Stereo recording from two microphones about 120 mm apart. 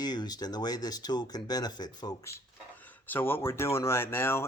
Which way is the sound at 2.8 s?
15° left (ahead or behind).